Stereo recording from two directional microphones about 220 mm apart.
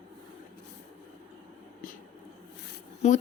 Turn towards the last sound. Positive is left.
turn(degrees=30)  # may be behind; listen again after turning